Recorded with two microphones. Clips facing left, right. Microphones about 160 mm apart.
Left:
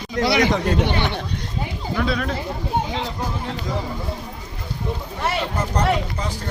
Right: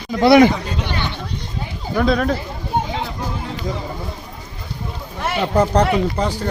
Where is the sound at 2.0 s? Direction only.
45° right (ahead or behind).